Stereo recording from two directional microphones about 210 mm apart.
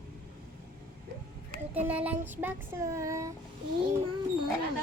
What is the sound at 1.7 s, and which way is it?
Speech, 10° right (ahead or behind).